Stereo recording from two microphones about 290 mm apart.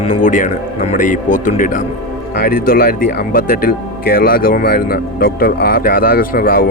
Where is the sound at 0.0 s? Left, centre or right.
Left.